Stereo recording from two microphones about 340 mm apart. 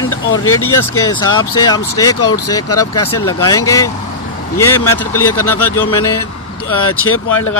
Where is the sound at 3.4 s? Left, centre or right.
Centre.